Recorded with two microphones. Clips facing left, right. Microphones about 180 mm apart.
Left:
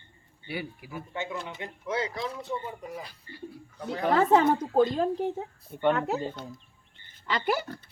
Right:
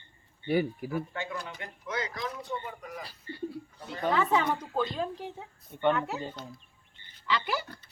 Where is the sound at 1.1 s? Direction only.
25° left (ahead or behind).